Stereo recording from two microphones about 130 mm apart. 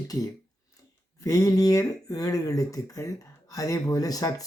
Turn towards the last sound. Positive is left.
turn(degrees=30)  # may be behind; listen again after turning